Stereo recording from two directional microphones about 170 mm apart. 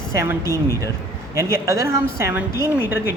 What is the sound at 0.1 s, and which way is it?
Speech, 15° right (ahead or behind).